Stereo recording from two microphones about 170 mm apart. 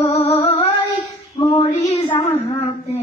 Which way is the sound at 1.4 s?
25° left (ahead or behind).